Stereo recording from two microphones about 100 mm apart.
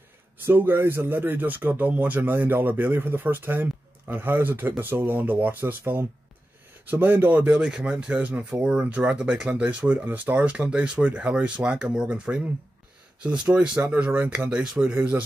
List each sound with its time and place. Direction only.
0.5 s a man's voice: 20° right (ahead or behind)